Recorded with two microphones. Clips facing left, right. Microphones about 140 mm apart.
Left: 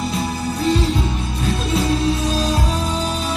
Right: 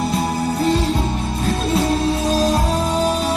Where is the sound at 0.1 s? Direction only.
45° right (ahead or behind).